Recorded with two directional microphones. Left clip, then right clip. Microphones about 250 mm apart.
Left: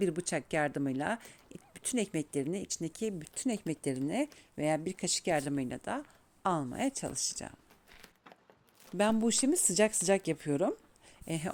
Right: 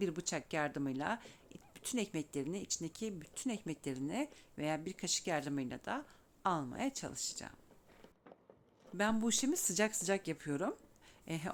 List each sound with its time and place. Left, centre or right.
0.0 s speech: centre
9.0 s speech: left